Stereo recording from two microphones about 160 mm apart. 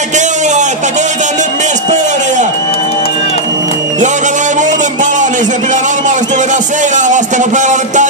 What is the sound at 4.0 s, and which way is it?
Music, 50° right (ahead or behind).